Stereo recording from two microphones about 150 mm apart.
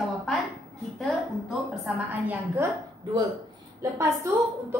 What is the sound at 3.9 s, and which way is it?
Speech, 20° right (ahead or behind).